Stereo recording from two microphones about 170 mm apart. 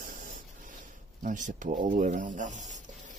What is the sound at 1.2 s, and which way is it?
Speech, 50° right (ahead or behind).